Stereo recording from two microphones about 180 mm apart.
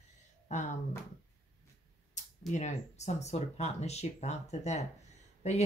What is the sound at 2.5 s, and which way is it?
Speech, 40° left (ahead or behind).